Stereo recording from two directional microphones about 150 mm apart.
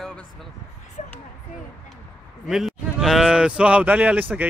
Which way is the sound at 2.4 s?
Centre (ahead or behind).